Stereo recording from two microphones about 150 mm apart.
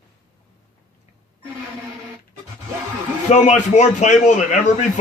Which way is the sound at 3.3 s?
50° left (ahead or behind).